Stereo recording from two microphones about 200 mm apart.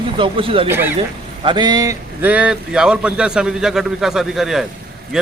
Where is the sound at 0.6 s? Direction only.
10° right (ahead or behind).